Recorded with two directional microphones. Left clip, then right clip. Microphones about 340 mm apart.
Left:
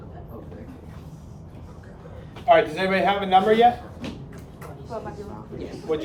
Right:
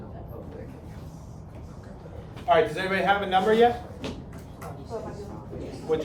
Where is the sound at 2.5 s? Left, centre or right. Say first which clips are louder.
Left 4 dB; left.